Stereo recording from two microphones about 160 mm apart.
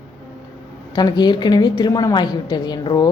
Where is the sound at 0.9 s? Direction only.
25° left (ahead or behind).